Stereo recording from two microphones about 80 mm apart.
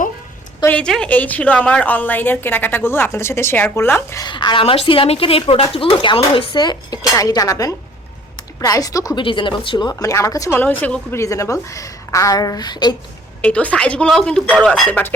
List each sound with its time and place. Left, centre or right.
0.7 s a woman's voice: centre
1.0 s a woman's voice: left
4.3 s a woman's voice: left
7.2 s a woman's voice: left
9.1 s a woman's voice: left
9.9 s a woman's voice: left
10.5 s a woman's voice: left
11.1 s a woman's voice: left
13.4 s a woman's voice: centre
14.8 s a woman's voice: left